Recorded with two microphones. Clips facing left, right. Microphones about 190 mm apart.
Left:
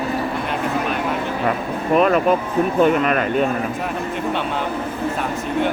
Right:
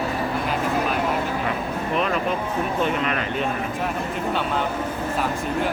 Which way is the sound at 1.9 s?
50° left (ahead or behind).